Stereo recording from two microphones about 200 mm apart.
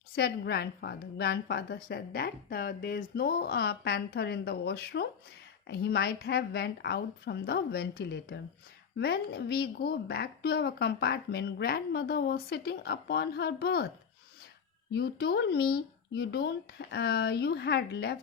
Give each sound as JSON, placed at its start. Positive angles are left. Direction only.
{"t": 0.2, "sound": "a woman's voice", "side_deg": 50}
{"t": 14.9, "sound": "a woman's voice", "side_deg": 50}